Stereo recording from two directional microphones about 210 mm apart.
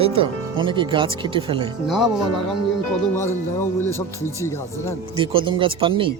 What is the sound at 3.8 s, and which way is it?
Speech, 10° left (ahead or behind).